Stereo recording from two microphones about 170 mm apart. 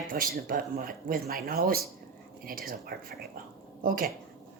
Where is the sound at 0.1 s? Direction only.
55° right (ahead or behind).